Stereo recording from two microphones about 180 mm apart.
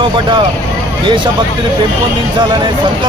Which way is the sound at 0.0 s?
25° right (ahead or behind).